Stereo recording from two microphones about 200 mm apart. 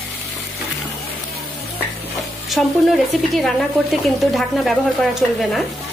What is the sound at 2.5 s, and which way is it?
A woman's voice, centre (ahead or behind).